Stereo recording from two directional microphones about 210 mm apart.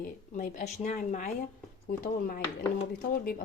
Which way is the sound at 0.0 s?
40° left (ahead or behind).